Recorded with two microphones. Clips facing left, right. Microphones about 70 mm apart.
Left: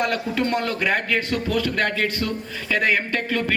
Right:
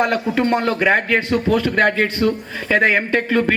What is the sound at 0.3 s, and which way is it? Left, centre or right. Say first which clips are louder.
A man's voice: right 5 dB; right.